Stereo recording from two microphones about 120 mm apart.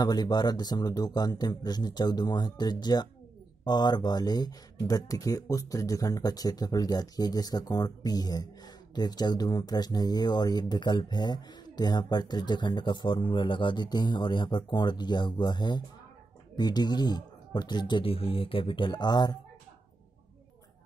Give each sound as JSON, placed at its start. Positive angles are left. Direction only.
{"t": 0.0, "sound": "speech", "side_deg": 35}